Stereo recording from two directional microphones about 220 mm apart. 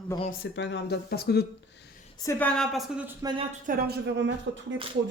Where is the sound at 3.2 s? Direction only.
25° right (ahead or behind).